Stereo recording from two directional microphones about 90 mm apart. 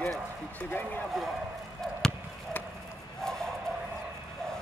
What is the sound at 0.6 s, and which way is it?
Speech, 20° left (ahead or behind).